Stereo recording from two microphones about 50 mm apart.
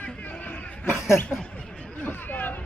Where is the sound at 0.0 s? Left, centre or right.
Left.